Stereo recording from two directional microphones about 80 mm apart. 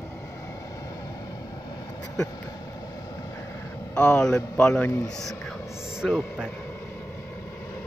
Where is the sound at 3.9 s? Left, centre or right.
Centre.